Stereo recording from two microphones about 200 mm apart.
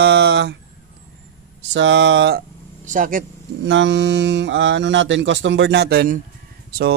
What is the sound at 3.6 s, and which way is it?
Speech, 65° right (ahead or behind).